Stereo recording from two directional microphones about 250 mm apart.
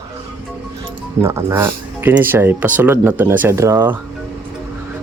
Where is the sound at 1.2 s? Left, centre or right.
Centre.